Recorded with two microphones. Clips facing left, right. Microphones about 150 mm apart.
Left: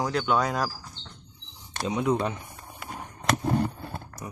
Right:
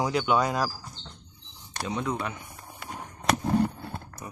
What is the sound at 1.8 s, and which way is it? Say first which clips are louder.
Speech: left 5 dB; 20° left (ahead or behind).